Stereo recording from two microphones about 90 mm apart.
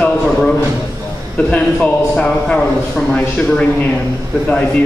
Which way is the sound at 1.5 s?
10° left (ahead or behind).